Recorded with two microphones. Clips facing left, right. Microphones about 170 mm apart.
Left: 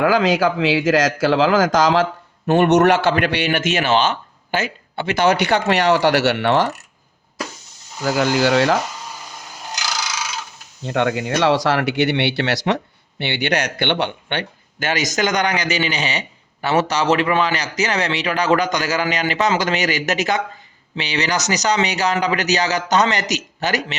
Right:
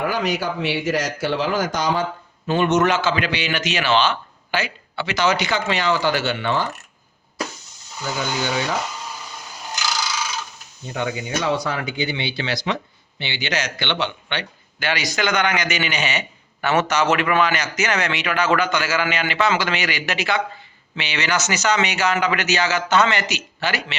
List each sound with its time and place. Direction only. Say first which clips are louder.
0.0 s speech: left 7 dB; 90° left
2.5 s a man's voice: left 5 dB; 65° left (ahead or behind)
8.0 s speech: left 8 dB; 90° left
10.8 s speech: left 6 dB; 80° left; by 24.0 s 40° left (ahead or behind)